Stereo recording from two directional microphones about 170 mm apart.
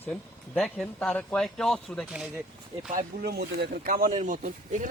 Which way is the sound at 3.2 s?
70° right (ahead or behind).